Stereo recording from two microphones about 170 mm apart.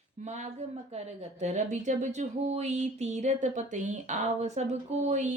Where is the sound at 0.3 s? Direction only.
45° right (ahead or behind).